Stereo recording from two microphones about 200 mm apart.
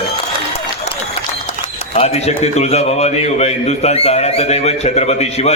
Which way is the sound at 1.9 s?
30° left (ahead or behind).